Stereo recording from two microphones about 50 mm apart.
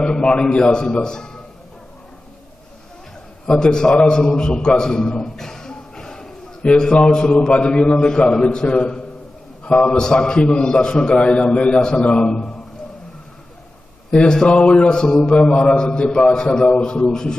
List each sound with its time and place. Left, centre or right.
0.0 s a man's voice: centre
3.5 s a man's voice: centre
14.1 s a man's voice: centre